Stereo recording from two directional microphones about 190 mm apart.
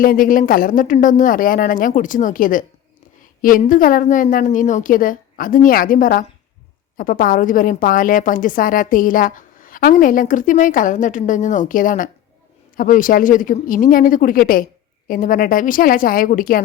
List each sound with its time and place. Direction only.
0.0 s a woman's voice: 45° left (ahead or behind)